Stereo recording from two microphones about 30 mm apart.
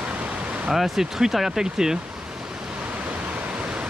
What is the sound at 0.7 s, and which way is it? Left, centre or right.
Speech, centre.